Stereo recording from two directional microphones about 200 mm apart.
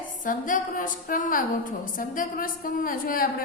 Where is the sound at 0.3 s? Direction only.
40° left (ahead or behind).